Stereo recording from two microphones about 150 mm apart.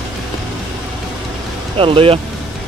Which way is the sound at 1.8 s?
35° right (ahead or behind).